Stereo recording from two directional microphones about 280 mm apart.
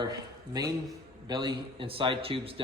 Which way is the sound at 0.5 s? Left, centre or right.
Centre.